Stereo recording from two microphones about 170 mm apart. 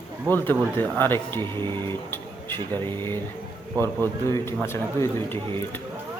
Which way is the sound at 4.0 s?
15° left (ahead or behind).